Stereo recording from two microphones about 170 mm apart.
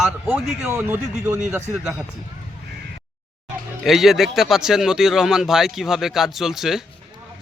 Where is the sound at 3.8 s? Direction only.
Centre (ahead or behind).